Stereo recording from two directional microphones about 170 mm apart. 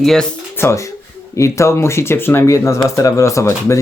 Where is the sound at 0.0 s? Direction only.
Centre (ahead or behind).